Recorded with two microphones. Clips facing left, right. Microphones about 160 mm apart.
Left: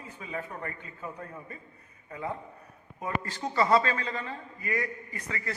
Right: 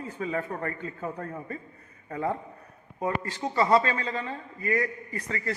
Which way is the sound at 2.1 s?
45° right (ahead or behind).